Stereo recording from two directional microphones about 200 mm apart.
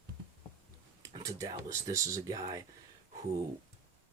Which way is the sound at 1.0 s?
15° right (ahead or behind).